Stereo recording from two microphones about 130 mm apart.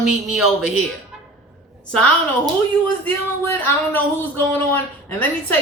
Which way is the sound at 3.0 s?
15° left (ahead or behind).